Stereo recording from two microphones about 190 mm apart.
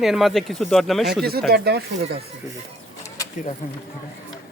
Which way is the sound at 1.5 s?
55° right (ahead or behind).